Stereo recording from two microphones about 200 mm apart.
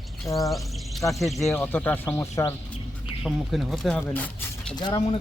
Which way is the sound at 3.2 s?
Centre (ahead or behind).